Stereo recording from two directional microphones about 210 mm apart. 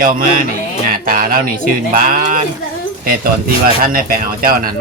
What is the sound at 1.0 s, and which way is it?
Speech, 40° right (ahead or behind).